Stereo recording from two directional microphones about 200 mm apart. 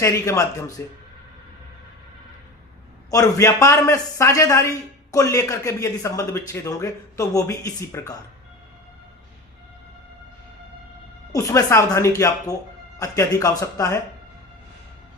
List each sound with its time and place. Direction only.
0.0 s speech: 15° left (ahead or behind)
3.1 s speech: 15° left (ahead or behind)
11.3 s speech: 15° left (ahead or behind)